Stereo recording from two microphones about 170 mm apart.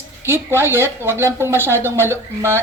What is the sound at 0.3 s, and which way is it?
A woman's voice, 15° right (ahead or behind).